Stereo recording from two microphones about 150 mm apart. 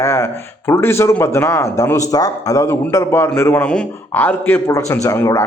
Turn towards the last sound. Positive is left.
turn(degrees=20)  # may be behind; listen again after turning